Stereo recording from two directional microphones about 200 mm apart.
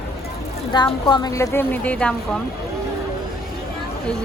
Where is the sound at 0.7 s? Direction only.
20° left (ahead or behind).